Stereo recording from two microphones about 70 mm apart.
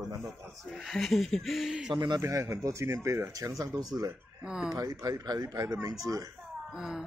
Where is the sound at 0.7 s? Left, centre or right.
Centre.